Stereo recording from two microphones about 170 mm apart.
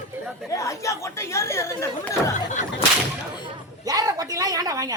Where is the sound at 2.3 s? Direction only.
45° left (ahead or behind).